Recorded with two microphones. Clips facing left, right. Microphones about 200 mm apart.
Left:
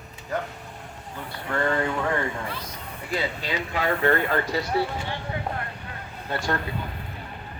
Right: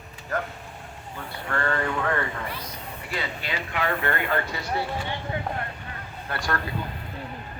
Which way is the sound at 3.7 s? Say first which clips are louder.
Left 4 dB; 35° left (ahead or behind).